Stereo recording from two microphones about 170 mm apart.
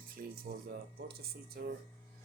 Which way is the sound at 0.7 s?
65° right (ahead or behind).